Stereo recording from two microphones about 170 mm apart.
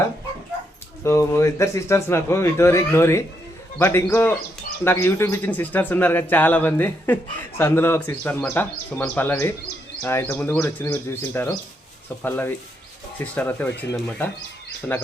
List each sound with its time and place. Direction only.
1.0 s speech: 15° left (ahead or behind)